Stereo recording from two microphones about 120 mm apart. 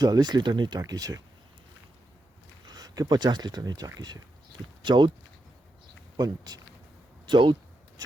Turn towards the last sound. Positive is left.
turn(degrees=-40)  # may be behind; listen again after turning